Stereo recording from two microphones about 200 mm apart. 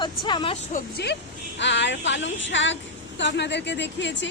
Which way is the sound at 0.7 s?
55° left (ahead or behind).